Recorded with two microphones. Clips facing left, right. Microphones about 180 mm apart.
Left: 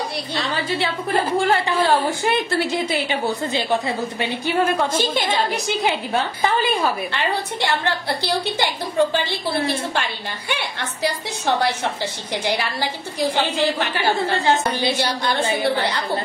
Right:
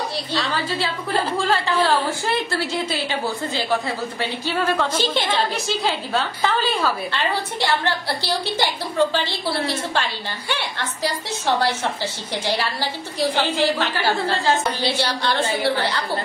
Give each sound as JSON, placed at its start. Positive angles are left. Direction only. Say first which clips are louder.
{"t": 0.3, "sound": "a woman's voice", "louder": "left 1 dB", "side_deg": 15}
{"t": 10.5, "sound": "a woman's voice", "louder": "even", "side_deg": 15}